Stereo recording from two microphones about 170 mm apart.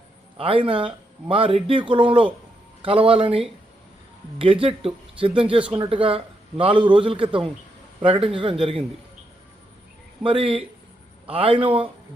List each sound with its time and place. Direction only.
0.3 s speech: 30° right (ahead or behind)
10.2 s speech: 35° right (ahead or behind)